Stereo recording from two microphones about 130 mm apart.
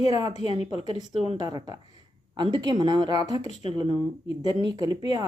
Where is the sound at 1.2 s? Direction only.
40° right (ahead or behind).